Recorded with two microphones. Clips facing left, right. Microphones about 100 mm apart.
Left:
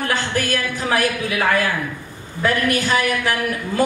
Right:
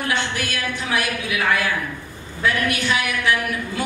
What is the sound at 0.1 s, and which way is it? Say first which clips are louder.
A woman's voice: left 4 dB; 40° left (ahead or behind).